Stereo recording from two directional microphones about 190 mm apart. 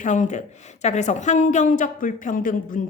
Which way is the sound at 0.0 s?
40° left (ahead or behind).